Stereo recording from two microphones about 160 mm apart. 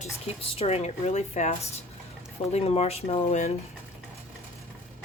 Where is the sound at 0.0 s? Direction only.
40° left (ahead or behind).